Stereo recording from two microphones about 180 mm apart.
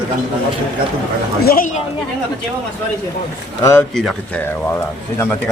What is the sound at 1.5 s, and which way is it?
Speech, 50° left (ahead or behind).